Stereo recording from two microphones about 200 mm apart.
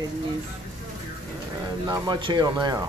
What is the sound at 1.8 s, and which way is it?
A man's voice, 20° right (ahead or behind).